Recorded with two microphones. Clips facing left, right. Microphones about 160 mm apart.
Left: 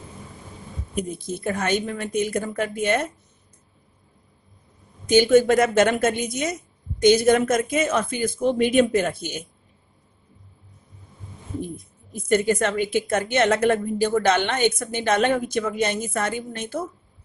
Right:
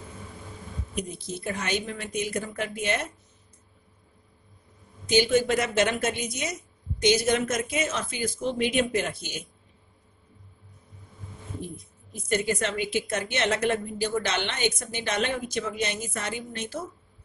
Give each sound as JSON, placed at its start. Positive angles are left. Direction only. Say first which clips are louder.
{"t": 0.9, "sound": "a woman's voice", "louder": "left 6 dB", "side_deg": 50}
{"t": 5.0, "sound": "a man's voice", "louder": "left 6 dB", "side_deg": 50}
{"t": 12.1, "sound": "a woman's voice", "louder": "left 6 dB", "side_deg": 50}